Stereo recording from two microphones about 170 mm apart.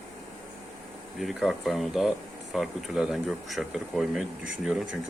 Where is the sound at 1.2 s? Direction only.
Centre (ahead or behind).